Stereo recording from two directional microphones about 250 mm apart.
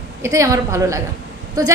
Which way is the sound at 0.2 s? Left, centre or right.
Centre.